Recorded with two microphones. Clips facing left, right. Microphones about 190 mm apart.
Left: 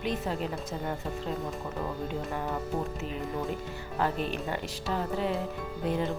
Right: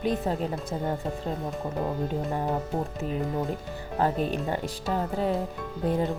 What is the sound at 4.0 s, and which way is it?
Speech, 40° right (ahead or behind).